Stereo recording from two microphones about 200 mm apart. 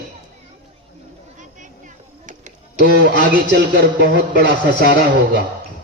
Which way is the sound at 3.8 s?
60° right (ahead or behind).